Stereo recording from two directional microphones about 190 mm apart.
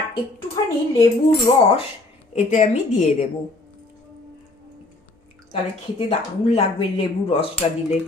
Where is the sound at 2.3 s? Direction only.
40° left (ahead or behind).